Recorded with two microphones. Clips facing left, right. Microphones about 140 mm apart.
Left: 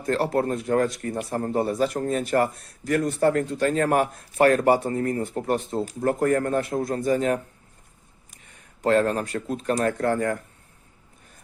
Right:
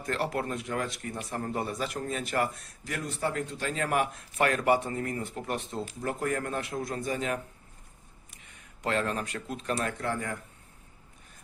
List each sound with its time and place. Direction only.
0.0 s a man's voice: 40° left (ahead or behind)